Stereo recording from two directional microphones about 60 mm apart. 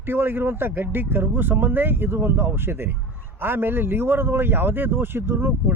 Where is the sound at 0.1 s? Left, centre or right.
Right.